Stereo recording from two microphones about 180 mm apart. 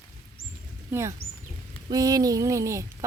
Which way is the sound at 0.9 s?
15° right (ahead or behind).